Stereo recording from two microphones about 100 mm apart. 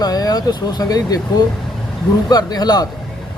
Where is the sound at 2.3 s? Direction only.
40° left (ahead or behind).